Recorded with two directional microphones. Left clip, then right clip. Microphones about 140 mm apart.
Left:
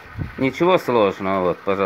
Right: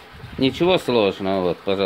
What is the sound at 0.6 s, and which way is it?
Speech, 40° right (ahead or behind).